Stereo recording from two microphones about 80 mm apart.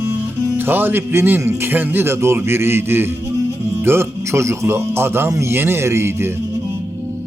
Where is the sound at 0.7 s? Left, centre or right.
Right.